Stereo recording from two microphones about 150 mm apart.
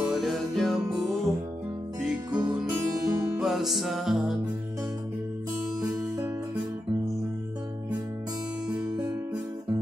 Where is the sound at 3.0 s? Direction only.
20° right (ahead or behind).